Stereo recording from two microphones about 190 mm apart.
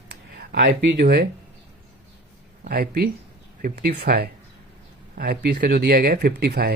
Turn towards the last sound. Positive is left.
turn(degrees=-55)  # may be behind; listen again after turning